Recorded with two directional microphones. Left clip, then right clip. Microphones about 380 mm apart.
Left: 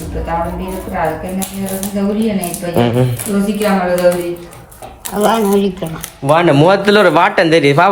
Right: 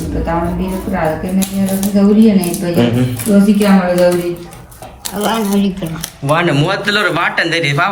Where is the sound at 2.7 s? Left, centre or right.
Left.